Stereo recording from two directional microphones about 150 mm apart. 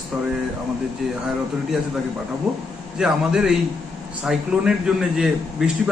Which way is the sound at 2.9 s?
5° right (ahead or behind).